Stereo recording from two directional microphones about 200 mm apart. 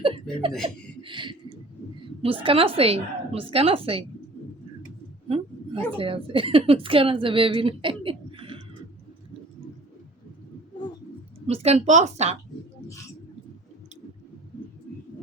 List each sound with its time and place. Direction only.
0.0 s chuckle: 25° right (ahead or behind)
1.0 s a sound: 25° right (ahead or behind)
2.2 s a woman's voice: 30° right (ahead or behind)
5.3 s a woman's voice: 25° right (ahead or behind)
11.4 s a woman's voice: 30° right (ahead or behind)